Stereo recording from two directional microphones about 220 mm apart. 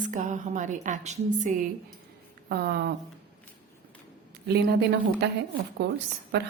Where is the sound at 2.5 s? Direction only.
45° right (ahead or behind).